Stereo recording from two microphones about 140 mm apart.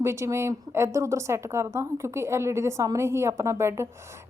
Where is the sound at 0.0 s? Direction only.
20° right (ahead or behind).